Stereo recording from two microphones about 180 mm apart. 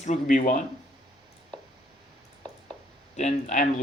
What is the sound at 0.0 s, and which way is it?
Speech, 45° left (ahead or behind).